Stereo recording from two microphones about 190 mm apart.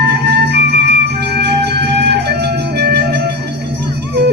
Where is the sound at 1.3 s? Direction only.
60° right (ahead or behind).